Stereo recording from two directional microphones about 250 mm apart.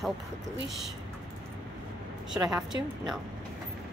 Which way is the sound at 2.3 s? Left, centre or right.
Centre.